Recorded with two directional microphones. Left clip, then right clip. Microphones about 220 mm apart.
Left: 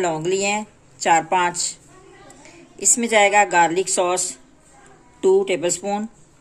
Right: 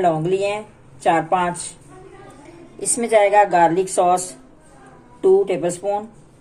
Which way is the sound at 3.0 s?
55° left (ahead or behind).